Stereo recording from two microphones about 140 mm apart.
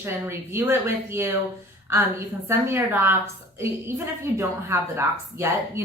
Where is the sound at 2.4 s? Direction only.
15° right (ahead or behind).